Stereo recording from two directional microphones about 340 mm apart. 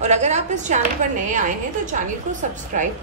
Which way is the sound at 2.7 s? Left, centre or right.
Right.